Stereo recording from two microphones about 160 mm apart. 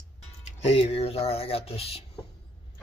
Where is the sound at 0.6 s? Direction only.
40° left (ahead or behind).